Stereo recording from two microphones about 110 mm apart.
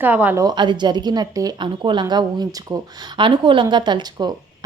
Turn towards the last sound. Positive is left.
turn(degrees=-40)  # may be behind; listen again after turning